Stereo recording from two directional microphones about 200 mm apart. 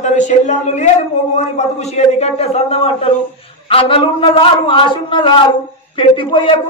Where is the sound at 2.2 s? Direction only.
30° left (ahead or behind).